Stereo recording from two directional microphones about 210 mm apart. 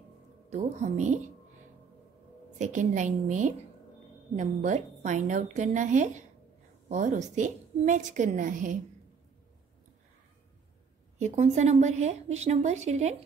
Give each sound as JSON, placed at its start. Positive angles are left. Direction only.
{"t": 0.5, "sound": "a woman's voice", "side_deg": -35}
{"t": 2.6, "sound": "a woman's voice", "side_deg": -35}
{"t": 11.1, "sound": "a woman's voice", "side_deg": -35}